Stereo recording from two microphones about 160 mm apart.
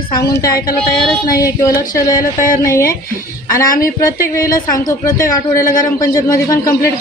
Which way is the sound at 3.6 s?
60° left (ahead or behind).